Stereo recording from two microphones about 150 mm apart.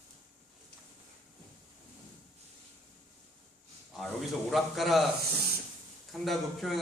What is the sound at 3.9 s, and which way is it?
A man's voice, centre (ahead or behind).